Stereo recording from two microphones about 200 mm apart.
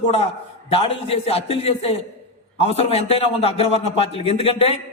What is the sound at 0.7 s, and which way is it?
Speech, 30° left (ahead or behind).